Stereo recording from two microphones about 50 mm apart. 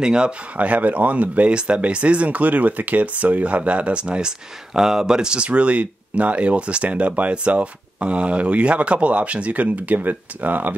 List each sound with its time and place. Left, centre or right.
0.0 s speech: centre
0.6 s speech: right